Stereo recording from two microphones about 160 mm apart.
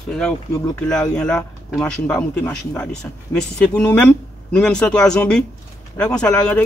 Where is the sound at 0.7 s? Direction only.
5° left (ahead or behind).